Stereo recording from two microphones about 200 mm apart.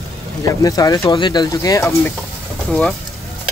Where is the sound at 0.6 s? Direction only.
20° left (ahead or behind).